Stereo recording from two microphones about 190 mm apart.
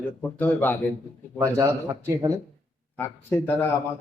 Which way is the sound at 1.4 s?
15° right (ahead or behind).